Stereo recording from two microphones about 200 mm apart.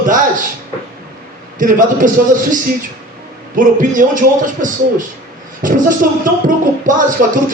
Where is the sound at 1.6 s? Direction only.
40° right (ahead or behind).